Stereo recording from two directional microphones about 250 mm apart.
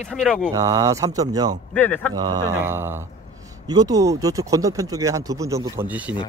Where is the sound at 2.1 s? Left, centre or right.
Centre.